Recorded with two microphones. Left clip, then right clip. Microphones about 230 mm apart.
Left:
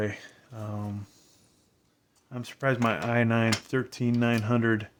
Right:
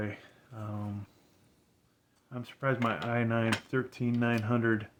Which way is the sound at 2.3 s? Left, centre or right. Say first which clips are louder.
Left 4 dB; left.